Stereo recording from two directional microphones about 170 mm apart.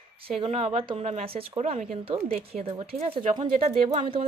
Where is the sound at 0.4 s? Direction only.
40° right (ahead or behind).